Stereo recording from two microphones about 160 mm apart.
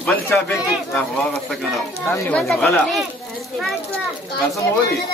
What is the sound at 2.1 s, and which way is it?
Speech, 10° left (ahead or behind).